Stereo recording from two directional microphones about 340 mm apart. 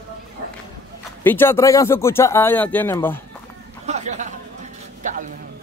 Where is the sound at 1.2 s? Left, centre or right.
Centre.